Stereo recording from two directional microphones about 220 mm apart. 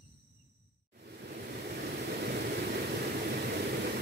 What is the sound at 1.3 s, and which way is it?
Waves, 45° right (ahead or behind).